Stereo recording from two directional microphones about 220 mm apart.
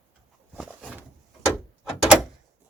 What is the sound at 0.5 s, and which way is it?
Door, 5° right (ahead or behind).